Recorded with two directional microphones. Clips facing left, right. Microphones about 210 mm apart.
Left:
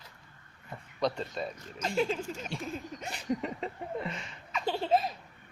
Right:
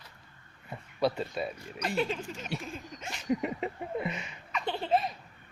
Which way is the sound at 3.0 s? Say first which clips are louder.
Left 1 dB; 35° left (ahead or behind).